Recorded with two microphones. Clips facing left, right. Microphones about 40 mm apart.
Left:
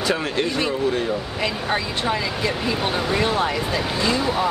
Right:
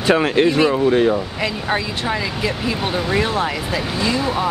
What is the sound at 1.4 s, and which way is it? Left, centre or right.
Speech, centre.